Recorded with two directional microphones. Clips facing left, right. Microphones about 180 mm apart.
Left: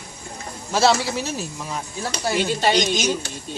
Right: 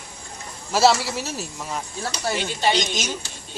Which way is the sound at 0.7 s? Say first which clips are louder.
Even; 5° right (ahead or behind).